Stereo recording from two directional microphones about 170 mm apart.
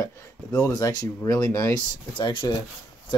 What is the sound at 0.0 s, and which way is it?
Speech, 20° left (ahead or behind).